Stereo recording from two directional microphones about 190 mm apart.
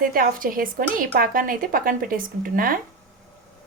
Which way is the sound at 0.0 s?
45° right (ahead or behind).